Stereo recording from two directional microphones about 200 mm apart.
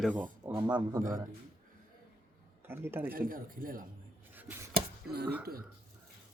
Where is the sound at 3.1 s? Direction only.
45° right (ahead or behind).